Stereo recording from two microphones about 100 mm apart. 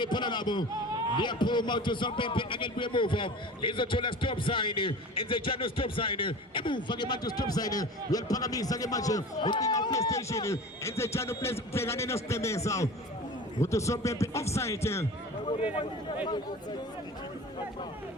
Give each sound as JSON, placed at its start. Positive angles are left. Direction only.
{"t": 0.0, "sound": "a man's voice", "side_deg": 50}
{"t": 15.4, "sound": "a man's voice", "side_deg": 65}